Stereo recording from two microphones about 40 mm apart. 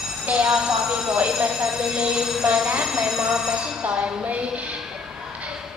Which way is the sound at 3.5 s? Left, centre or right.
Right.